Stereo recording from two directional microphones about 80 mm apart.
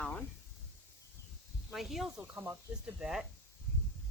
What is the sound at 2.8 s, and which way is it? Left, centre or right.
Speech, centre.